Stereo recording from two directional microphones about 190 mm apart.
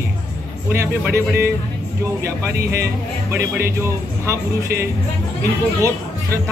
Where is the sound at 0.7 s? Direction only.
15° right (ahead or behind).